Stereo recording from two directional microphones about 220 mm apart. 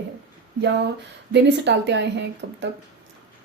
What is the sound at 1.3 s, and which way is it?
A woman's voice, 50° right (ahead or behind).